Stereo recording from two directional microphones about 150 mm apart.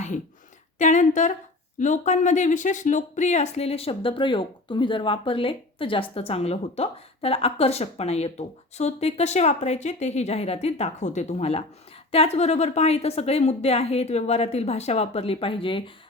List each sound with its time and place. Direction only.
0.8 s speech: 55° left (ahead or behind); by 15.8 s 35° left (ahead or behind)